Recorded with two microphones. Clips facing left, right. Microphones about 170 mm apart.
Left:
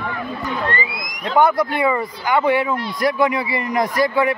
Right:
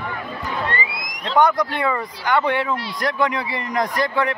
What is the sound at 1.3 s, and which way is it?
Speech, 5° left (ahead or behind).